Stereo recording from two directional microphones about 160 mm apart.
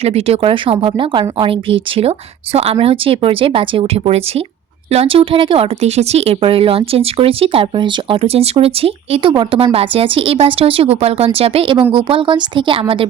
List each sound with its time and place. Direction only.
0.0 s speech: 40° right (ahead or behind)